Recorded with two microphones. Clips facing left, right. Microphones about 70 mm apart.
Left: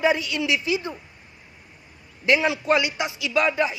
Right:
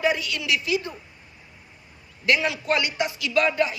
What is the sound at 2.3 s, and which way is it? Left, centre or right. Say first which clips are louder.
A man's voice: left 3 dB; left.